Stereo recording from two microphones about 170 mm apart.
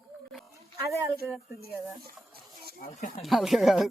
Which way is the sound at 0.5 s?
20° right (ahead or behind).